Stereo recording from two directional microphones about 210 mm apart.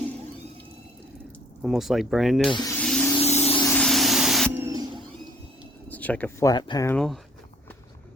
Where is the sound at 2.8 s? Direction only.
5° left (ahead or behind).